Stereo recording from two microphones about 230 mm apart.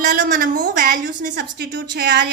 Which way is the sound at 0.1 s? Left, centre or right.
Right.